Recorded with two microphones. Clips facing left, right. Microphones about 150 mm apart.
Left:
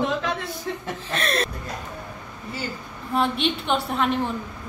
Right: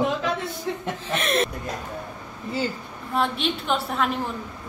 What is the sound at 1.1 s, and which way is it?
Speech, 20° right (ahead or behind).